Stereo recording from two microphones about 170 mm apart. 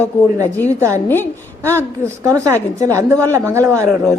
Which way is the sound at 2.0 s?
20° right (ahead or behind).